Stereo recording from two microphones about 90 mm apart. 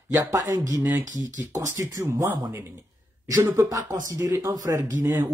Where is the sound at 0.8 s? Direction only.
25° right (ahead or behind).